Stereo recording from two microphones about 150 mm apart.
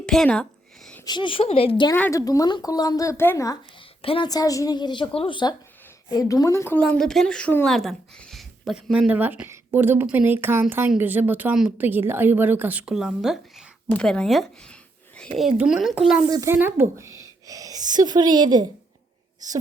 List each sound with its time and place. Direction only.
0.0 s speech: 5° left (ahead or behind)
1.0 s a woman's voice: 30° left (ahead or behind)
2.0 s speech: 20° left (ahead or behind)
4.0 s a woman's voice: 40° left (ahead or behind)
4.3 s a woman's voice: 25° left (ahead or behind); by 13.7 s 5° right (ahead or behind)
13.8 s speech: 5° left (ahead or behind)
15.4 s speech: 5° right (ahead or behind)
16.3 s a woman's voice: 20° right (ahead or behind)